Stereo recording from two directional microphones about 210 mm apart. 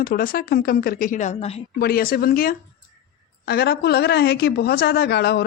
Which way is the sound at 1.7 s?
45° left (ahead or behind).